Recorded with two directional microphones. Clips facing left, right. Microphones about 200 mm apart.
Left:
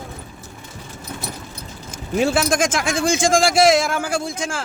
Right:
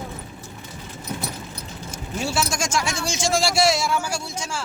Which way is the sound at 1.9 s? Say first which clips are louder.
Left 7 dB; 55° left (ahead or behind).